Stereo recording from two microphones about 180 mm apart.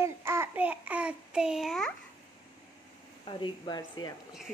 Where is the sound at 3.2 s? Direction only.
25° left (ahead or behind).